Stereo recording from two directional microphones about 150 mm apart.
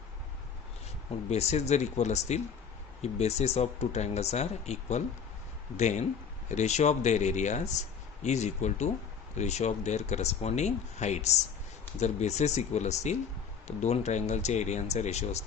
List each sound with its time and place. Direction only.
1.3 s speech: 45° left (ahead or behind)